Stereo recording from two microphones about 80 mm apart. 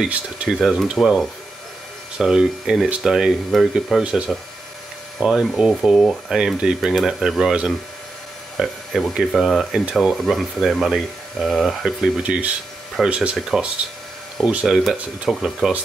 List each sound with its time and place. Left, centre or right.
0.0 s speech: centre
8.5 s speech: centre
12.2 s speech: centre
15.3 s speech: centre